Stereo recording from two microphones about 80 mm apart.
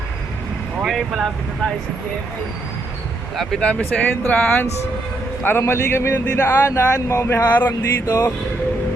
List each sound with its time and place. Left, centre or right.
0.8 s speech: centre
3.6 s speech: centre
5.4 s a man's voice: left
7.7 s a sound: left